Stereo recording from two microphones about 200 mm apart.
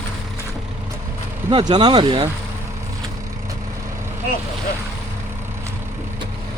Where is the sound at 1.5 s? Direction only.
20° right (ahead or behind).